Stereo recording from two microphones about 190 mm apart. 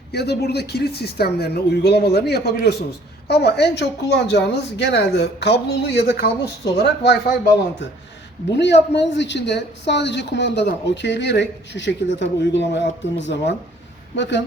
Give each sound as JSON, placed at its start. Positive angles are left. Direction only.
{"t": 0.1, "sound": "a woman's voice", "side_deg": 60}
{"t": 8.5, "sound": "speech", "side_deg": 65}